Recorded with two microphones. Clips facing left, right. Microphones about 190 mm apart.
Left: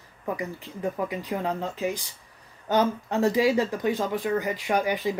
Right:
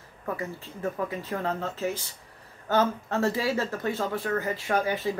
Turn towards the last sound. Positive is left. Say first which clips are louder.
# left 1 dB
turn(degrees=15)  # may be behind; listen again after turning